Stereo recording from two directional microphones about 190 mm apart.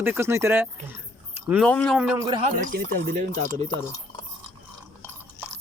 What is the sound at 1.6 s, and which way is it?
Speech, 5° left (ahead or behind).